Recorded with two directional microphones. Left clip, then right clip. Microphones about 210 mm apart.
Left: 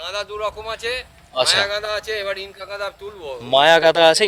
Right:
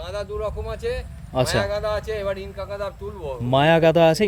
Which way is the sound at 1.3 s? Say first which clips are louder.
Left 5 dB; 5° right (ahead or behind).